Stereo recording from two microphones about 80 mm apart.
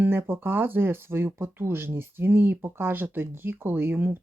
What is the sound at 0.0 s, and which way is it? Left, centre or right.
Speech, right.